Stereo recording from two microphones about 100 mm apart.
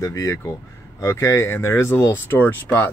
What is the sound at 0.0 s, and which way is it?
Speech, 30° left (ahead or behind).